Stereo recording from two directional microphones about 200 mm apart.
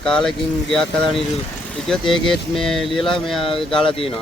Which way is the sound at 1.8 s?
Centre (ahead or behind).